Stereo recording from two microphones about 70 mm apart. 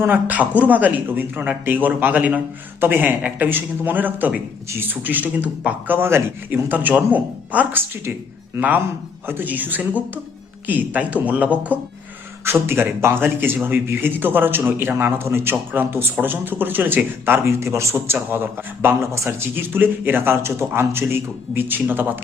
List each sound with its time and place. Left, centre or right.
0.0 s a man's voice: right
9.2 s a man's voice: right
12.5 s a man's voice: right
17.9 s a man's voice: right
19.1 s speech: right
19.5 s a man's voice: right